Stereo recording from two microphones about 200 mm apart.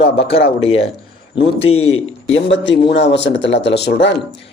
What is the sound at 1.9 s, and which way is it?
Speech, 85° left.